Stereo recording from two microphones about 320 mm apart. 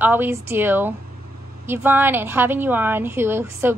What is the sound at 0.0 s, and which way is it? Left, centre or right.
A woman's voice, centre.